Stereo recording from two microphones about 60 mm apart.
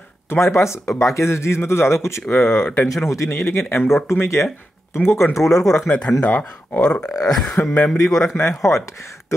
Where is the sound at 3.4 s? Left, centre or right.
Left.